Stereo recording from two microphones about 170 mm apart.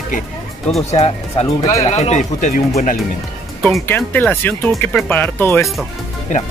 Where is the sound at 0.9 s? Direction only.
40° left (ahead or behind).